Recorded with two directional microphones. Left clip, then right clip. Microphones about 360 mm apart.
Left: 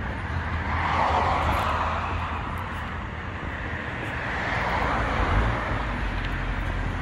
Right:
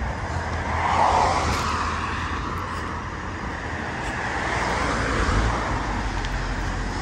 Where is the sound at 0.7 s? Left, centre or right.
Centre.